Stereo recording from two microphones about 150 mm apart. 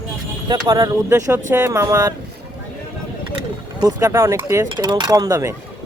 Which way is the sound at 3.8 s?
20° right (ahead or behind).